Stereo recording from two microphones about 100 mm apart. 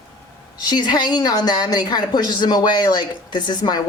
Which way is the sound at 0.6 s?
45° left (ahead or behind).